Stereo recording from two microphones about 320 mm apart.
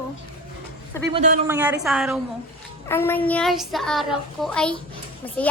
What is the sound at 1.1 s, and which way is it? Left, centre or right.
Speech, right.